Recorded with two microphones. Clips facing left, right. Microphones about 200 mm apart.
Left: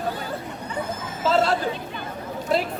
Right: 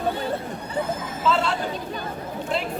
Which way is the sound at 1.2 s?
40° left (ahead or behind).